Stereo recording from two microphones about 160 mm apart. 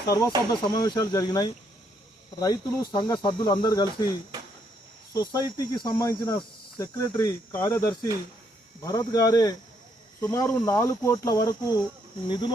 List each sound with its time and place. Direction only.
0.5 s speech: 25° left (ahead or behind)